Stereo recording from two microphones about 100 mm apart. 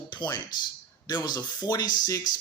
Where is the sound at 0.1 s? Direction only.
50° left (ahead or behind).